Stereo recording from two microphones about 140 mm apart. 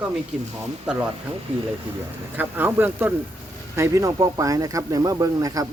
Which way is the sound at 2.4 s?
15° right (ahead or behind).